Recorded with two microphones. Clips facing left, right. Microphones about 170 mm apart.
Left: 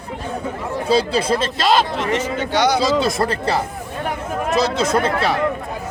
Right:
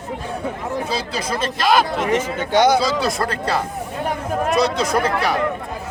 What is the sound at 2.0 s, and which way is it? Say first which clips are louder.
Speech: right 1 dB; 50° right (ahead or behind).